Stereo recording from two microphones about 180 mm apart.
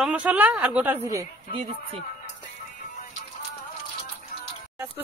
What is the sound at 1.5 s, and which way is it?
Speech, 35° right (ahead or behind).